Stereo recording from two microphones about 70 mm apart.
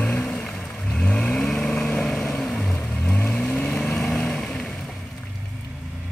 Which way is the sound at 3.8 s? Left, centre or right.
Centre.